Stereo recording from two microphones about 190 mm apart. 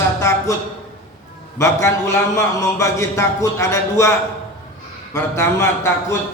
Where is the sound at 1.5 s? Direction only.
15° left (ahead or behind).